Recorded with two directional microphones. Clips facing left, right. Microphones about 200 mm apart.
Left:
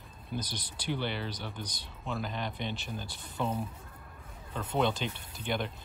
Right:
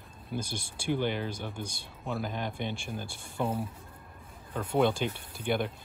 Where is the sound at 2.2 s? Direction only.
50° right (ahead or behind).